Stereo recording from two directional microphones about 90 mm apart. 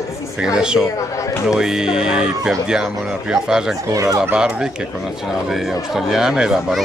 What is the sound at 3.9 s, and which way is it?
Speech, 40° right (ahead or behind).